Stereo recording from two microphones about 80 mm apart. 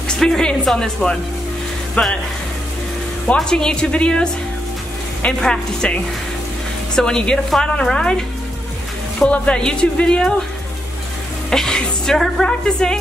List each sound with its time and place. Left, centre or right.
0.1 s speech: centre
3.3 s speech: centre
5.4 s speech: centre
7.0 s speech: centre
9.2 s speech: centre
11.5 s speech: centre